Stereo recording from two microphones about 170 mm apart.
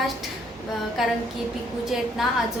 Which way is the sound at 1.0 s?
Centre (ahead or behind).